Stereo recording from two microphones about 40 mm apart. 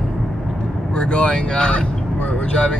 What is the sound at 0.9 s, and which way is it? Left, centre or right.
Speech, left.